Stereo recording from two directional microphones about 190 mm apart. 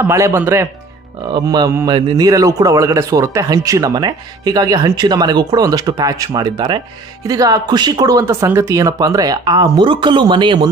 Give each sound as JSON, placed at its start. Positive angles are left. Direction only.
{"t": 0.0, "sound": "a man's voice", "side_deg": -15}